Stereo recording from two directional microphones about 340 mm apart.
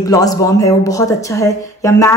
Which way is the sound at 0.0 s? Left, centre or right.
Centre.